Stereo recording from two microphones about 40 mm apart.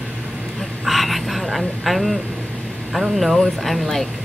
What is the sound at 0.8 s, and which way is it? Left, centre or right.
A woman's voice, centre.